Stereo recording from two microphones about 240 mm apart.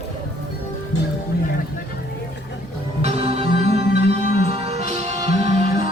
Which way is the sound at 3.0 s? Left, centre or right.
Right.